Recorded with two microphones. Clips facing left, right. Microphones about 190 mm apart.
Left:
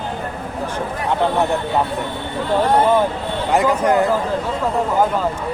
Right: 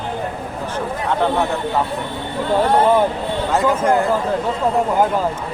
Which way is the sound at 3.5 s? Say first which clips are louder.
Left 1 dB; 20° left (ahead or behind).